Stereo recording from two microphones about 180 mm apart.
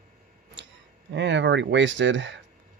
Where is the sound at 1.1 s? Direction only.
80° right.